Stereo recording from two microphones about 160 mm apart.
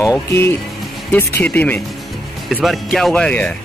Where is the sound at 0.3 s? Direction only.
15° left (ahead or behind).